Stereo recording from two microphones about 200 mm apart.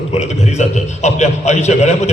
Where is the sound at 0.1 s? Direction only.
35° left (ahead or behind).